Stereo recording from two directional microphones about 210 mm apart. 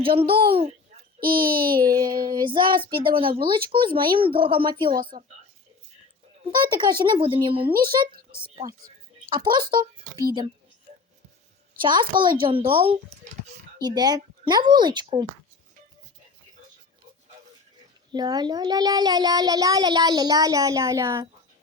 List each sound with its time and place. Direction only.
0.0 s a child's voice: 25° right (ahead or behind)
1.4 s a child's voice: 45° right (ahead or behind)
1.8 s a child's voice: 20° right (ahead or behind)
4.9 s speech: 40° right (ahead or behind)
6.6 s a child's voice: 20° right (ahead or behind)
7.8 s speech: 45° right (ahead or behind)
9.3 s a child's voice: 20° right (ahead or behind)
11.8 s a child's voice: 20° right (ahead or behind)
18.1 s a child's voice: 20° right (ahead or behind)